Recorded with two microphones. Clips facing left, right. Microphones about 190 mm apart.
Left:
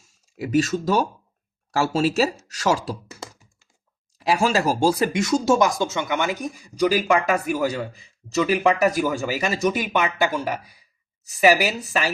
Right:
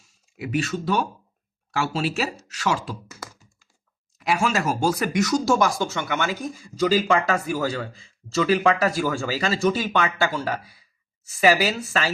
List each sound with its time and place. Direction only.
0.3 s speech: 40° left (ahead or behind)
2.5 s computer keyboard: 40° left (ahead or behind)
4.2 s speech: 30° left (ahead or behind); by 12.1 s 15° left (ahead or behind)